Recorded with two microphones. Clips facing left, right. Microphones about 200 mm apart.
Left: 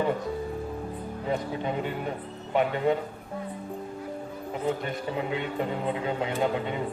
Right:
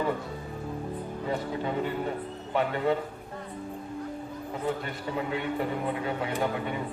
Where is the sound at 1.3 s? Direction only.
20° left (ahead or behind).